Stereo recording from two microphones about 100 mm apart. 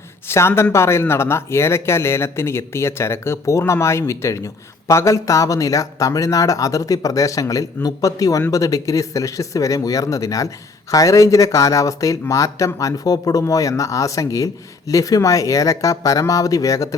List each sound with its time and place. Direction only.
0.3 s speech: 25° left (ahead or behind)